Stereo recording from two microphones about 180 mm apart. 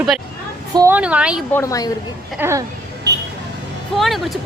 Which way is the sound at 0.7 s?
20° right (ahead or behind).